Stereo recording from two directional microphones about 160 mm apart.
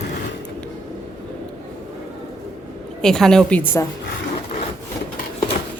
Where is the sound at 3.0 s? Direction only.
5° left (ahead or behind).